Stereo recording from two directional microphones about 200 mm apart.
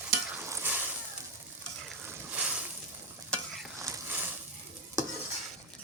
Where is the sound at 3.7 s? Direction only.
15° right (ahead or behind).